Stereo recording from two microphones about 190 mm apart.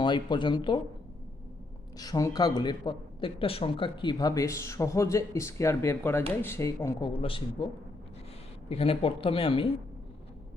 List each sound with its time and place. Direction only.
0.0 s speech: 25° left (ahead or behind)
2.0 s speech: 20° left (ahead or behind)
7.1 s speech: 30° left (ahead or behind)
8.7 s speech: 30° left (ahead or behind)